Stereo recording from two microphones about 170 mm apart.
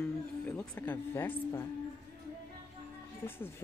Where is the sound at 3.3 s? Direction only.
15° left (ahead or behind).